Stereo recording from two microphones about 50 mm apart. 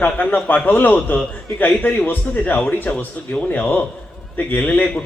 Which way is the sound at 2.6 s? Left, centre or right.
Left.